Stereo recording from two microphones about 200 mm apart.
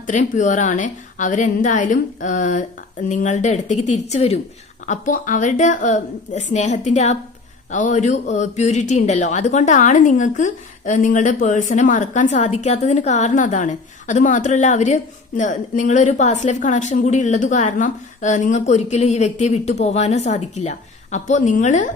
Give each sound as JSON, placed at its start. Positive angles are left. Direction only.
{"t": 0.1, "sound": "a man's voice", "side_deg": 40}